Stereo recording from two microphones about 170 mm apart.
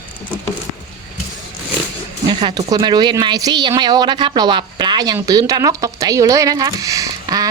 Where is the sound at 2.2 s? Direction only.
25° right (ahead or behind).